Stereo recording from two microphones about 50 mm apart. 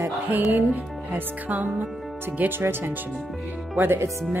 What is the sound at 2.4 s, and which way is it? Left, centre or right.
A woman's voice, right.